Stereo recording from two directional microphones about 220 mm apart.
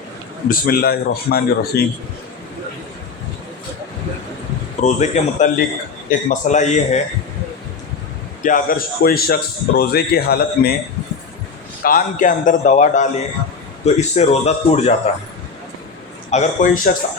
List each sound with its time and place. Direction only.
0.4 s a man's voice: 40° left (ahead or behind)
4.8 s a man's voice: 30° left (ahead or behind)
8.4 s a man's voice: 35° left (ahead or behind)
11.8 s a man's voice: 40° left (ahead or behind)
16.3 s a man's voice: 30° left (ahead or behind)